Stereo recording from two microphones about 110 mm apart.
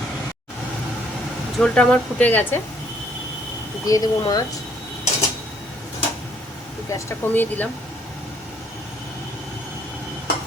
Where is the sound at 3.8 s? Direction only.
35° left (ahead or behind).